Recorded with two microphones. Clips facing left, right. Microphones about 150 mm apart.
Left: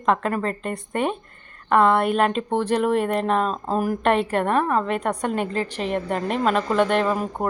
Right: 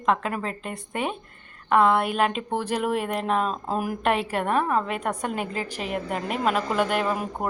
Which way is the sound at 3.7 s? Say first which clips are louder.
Left 4 dB; 40° left (ahead or behind).